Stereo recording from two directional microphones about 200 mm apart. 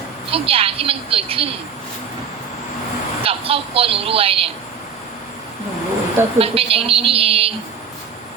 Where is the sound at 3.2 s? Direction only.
30° right (ahead or behind).